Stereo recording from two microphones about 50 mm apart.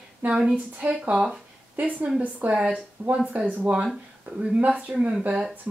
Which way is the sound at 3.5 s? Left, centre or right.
Right.